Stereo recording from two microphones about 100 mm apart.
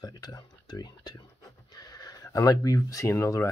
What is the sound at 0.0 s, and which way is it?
Speech, 40° left (ahead or behind).